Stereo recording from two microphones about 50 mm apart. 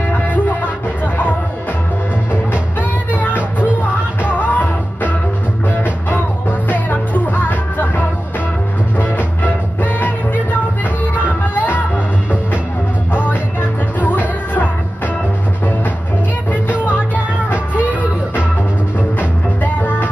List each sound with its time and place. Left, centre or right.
1.0 s music: left
2.3 s music: left
6.7 s music: left
13.9 s music: left
16.8 s music: left
19.1 s music: left